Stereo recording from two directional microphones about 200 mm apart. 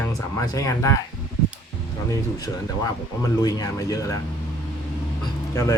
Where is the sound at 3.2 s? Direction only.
20° left (ahead or behind).